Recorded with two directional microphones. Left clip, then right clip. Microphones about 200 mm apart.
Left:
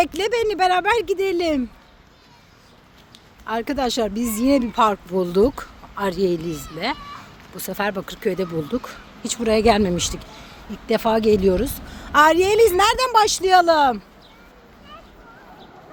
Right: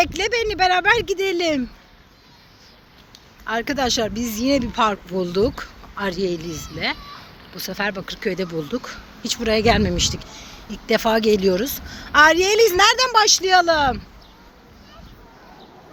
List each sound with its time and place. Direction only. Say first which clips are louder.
0.0 s a woman's voice: even; 15° left (ahead or behind)
3.4 s a woman's voice: right 1 dB; 5° left (ahead or behind)
10.8 s a woman's voice: even; centre (ahead or behind)